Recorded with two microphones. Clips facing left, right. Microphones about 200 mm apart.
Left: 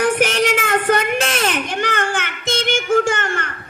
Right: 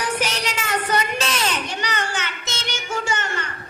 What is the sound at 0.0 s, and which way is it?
Child singing, 55° left (ahead or behind).